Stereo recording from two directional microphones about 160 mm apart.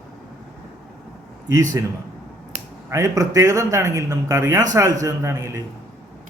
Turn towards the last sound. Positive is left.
turn(degrees=-15)  # may be behind; listen again after turning